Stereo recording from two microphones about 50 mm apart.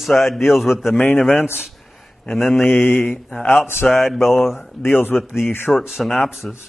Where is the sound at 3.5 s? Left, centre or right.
Left.